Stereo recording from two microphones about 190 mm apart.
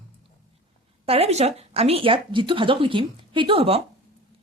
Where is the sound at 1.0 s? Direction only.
30° right (ahead or behind).